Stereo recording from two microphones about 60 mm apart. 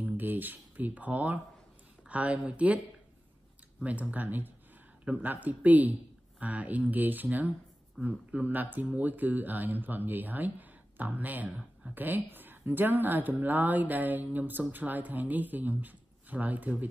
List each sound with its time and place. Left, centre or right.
0.0 s a woman's voice: right
3.8 s a woman's voice: right